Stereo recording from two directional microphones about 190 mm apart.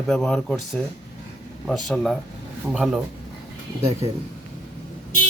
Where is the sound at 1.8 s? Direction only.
Centre (ahead or behind).